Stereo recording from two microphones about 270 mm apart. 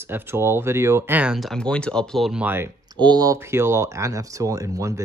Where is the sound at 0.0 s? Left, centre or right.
Centre.